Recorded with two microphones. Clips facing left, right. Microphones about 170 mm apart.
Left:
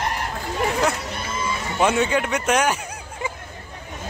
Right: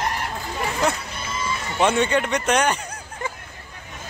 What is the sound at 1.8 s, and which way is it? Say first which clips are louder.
Speech: even; 5° left (ahead or behind).